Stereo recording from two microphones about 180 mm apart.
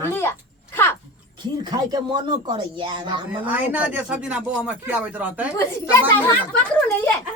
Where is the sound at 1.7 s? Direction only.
25° right (ahead or behind).